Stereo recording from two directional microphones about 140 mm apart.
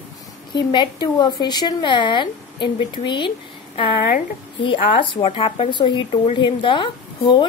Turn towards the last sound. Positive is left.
turn(degrees=35)  # may be behind; listen again after turning